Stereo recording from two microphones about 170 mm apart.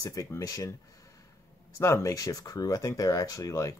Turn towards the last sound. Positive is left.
turn(degrees=20)  # may be behind; listen again after turning